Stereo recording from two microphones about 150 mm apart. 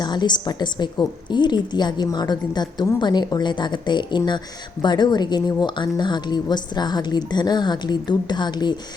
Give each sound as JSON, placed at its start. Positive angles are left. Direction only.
{"t": 0.0, "sound": "a woman's voice", "side_deg": 30}